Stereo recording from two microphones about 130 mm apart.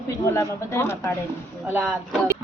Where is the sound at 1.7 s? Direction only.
15° right (ahead or behind).